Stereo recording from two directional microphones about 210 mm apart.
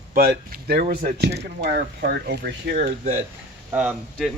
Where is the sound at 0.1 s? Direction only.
45° right (ahead or behind).